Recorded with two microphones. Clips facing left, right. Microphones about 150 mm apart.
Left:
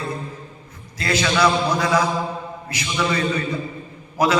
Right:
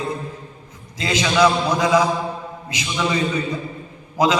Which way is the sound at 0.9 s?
15° right (ahead or behind).